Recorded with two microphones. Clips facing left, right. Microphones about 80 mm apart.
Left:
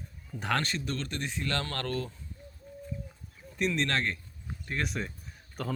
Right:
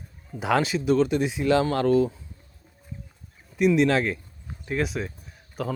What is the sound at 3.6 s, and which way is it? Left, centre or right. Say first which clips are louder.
Speech: right 10 dB; centre.